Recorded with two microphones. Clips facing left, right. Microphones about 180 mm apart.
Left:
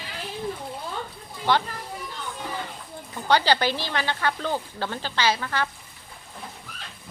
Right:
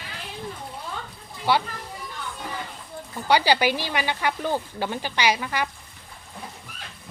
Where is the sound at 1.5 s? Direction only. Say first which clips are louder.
Even; 10° right (ahead or behind).